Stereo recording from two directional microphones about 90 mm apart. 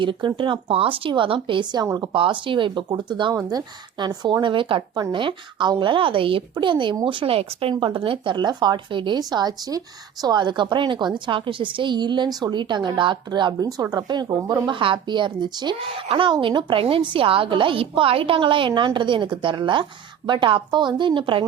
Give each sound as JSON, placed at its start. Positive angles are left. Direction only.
{"t": 0.0, "sound": "a woman's voice", "side_deg": -65}
{"t": 13.6, "sound": "a woman's voice", "side_deg": -45}
{"t": 16.0, "sound": "a woman's voice", "side_deg": -70}